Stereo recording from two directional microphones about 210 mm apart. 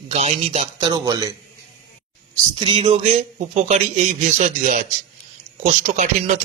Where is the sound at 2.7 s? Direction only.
25° right (ahead or behind).